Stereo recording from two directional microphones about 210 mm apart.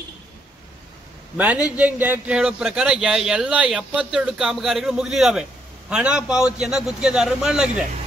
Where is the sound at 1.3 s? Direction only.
5° right (ahead or behind).